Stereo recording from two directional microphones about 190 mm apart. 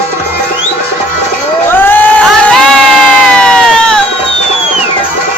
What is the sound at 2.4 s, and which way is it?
Crowd, 5° left (ahead or behind).